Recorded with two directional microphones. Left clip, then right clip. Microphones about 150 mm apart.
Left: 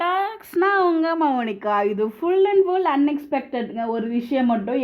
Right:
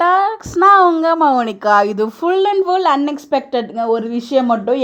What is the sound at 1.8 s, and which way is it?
Speech, 55° right (ahead or behind).